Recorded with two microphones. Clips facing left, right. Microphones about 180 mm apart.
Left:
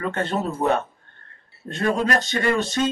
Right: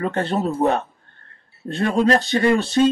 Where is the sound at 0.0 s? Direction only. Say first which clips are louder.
Right 3 dB; 35° right (ahead or behind).